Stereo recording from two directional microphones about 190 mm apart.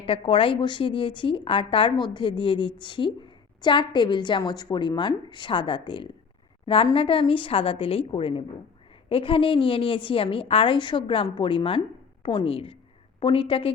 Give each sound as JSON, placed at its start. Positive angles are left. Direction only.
{"t": 0.0, "sound": "speech", "side_deg": 30}